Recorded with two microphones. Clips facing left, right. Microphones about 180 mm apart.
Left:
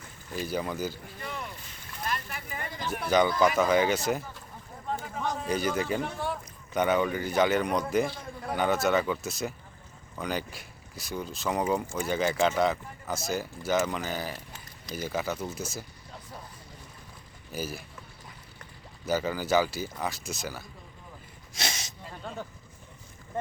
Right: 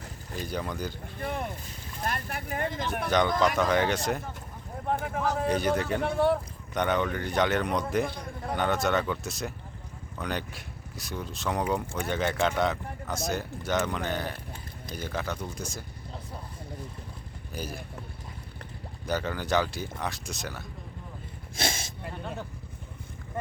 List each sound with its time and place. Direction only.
0.3 s a man's voice: 5° left (ahead or behind)
1.2 s speech: 50° right (ahead or behind)
3.1 s a man's voice: 5° left (ahead or behind)
4.9 s a sound: 60° right (ahead or behind)
5.5 s a man's voice: centre (ahead or behind)
6.0 s speech: 60° right (ahead or behind)
6.7 s a man's voice: 5° left (ahead or behind)
14.3 s a sound: 55° right (ahead or behind)
14.9 s a man's voice: 5° left (ahead or behind)
17.5 s a man's voice: 5° left (ahead or behind)
19.0 s a man's voice: 5° left (ahead or behind)
21.5 s a sound: 55° right (ahead or behind)